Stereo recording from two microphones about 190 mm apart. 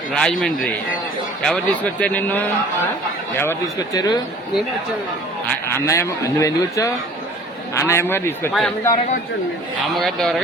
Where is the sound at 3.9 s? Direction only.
20° left (ahead or behind).